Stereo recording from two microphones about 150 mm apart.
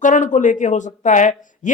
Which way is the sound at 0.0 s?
60° left (ahead or behind).